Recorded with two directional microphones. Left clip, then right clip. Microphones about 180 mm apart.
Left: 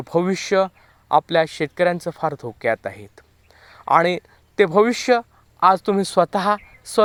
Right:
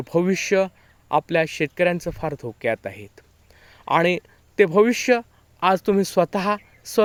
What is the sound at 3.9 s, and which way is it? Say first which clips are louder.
Speech: left 2 dB; 20° right (ahead or behind).